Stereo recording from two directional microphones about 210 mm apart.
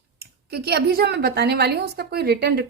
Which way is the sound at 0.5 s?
50° right (ahead or behind).